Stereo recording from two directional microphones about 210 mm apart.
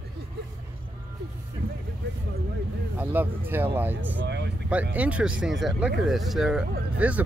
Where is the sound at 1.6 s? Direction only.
50° right (ahead or behind).